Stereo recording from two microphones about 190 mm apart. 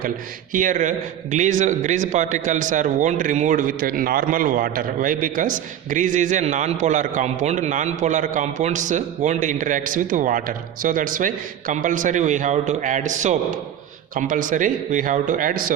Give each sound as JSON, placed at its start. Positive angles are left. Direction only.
{"t": 0.5, "sound": "a man's voice", "side_deg": -45}